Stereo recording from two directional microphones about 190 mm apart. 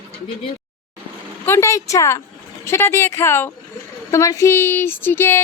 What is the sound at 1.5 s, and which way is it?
Speech, 15° left (ahead or behind).